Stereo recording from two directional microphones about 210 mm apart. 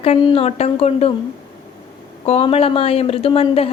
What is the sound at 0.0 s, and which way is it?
A woman's voice, 30° left (ahead or behind).